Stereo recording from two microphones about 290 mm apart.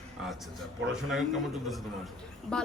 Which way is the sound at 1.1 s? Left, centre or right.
Centre.